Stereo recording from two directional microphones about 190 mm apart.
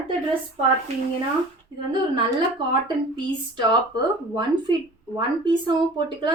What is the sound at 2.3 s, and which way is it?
A woman's voice, 25° right (ahead or behind).